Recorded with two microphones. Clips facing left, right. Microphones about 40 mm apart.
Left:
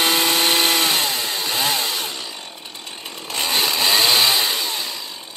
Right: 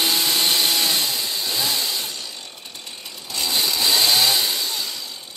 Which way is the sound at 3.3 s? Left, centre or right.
Left.